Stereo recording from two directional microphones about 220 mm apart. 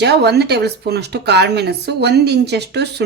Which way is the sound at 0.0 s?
50° right (ahead or behind).